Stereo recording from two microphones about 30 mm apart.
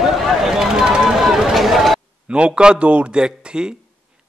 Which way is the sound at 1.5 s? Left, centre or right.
Centre.